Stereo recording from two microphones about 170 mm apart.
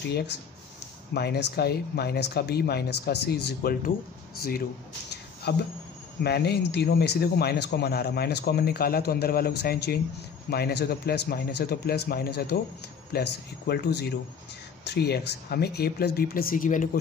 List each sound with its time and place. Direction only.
0.1 s speech: 75° left (ahead or behind); by 16.9 s 50° left (ahead or behind)